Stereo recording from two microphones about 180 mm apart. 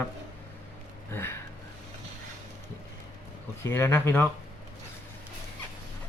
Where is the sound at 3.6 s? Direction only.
15° left (ahead or behind).